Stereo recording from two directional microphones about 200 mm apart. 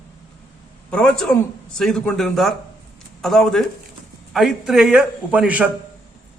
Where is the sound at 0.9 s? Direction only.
5° left (ahead or behind).